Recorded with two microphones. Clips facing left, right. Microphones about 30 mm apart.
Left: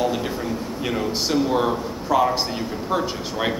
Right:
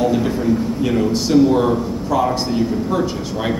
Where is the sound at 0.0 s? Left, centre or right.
Centre.